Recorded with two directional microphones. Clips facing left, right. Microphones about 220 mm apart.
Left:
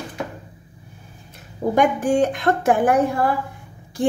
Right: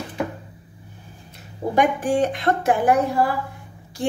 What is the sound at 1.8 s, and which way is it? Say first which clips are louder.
Speech: left 1 dB; 45° left (ahead or behind).